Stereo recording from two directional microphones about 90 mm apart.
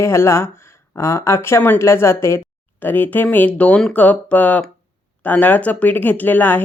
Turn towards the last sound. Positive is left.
turn(degrees=20)  # may be behind; listen again after turning